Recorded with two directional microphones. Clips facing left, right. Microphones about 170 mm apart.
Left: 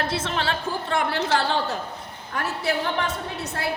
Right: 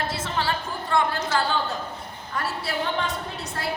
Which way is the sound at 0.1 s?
75° left (ahead or behind).